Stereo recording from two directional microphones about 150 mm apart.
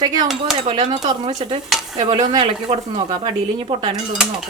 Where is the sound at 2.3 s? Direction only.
35° right (ahead or behind).